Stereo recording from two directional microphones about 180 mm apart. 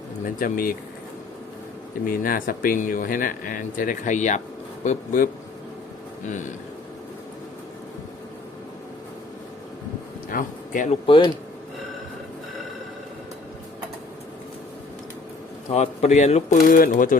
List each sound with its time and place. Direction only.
0.3 s speech: 50° left (ahead or behind)
2.0 s speech: 50° left (ahead or behind)
10.3 s speech: 50° left (ahead or behind)
11.0 s speech: 30° left (ahead or behind)
15.7 s speech: 40° left (ahead or behind)